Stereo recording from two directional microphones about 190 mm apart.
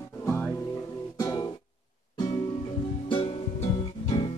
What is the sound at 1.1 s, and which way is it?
Music, 20° left (ahead or behind).